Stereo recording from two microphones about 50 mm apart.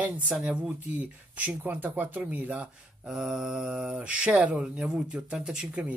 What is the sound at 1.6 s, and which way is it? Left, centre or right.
A man's voice, right.